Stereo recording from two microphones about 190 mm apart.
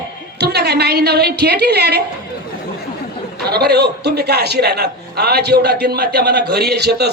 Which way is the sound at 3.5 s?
60° right (ahead or behind).